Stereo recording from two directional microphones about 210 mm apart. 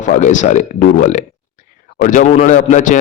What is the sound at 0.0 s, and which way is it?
Speech, 35° left (ahead or behind).